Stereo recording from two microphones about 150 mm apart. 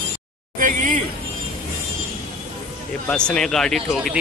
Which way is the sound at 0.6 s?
60° right (ahead or behind).